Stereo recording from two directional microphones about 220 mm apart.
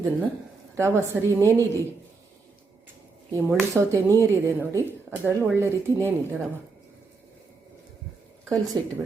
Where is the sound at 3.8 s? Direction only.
10° right (ahead or behind).